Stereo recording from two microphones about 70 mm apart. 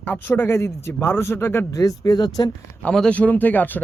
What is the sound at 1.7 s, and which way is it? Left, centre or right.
Speech, left.